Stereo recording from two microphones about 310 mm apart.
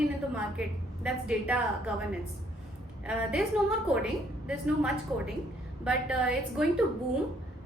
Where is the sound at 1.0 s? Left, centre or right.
Centre.